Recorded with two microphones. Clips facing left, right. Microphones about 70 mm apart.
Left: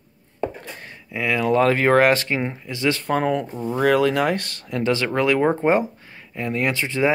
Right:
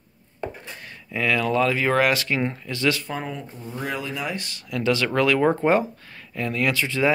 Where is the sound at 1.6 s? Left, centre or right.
Left.